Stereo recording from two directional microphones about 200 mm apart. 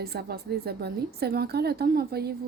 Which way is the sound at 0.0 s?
50° right (ahead or behind).